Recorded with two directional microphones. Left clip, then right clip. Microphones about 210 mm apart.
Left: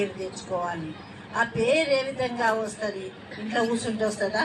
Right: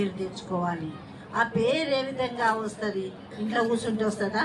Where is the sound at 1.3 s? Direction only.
45° left (ahead or behind).